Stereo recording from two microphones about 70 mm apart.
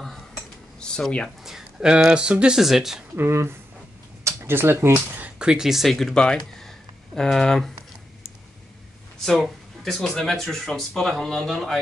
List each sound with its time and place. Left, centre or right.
0.7 s speech: centre
1.4 s speech: centre
3.2 s speech: right
4.2 s a sound: right
5.2 s speech: centre
5.9 s speech: centre
9.2 s speech: centre